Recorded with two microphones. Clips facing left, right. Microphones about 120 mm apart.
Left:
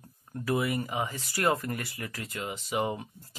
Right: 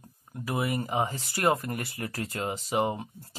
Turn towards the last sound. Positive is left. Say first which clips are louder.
# right 2 dB
turn(degrees=-30)  # may be behind; listen again after turning